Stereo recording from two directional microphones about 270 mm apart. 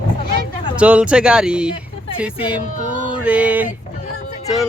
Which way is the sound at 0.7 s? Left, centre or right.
Centre.